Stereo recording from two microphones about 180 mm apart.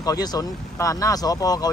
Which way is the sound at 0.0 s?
20° left (ahead or behind).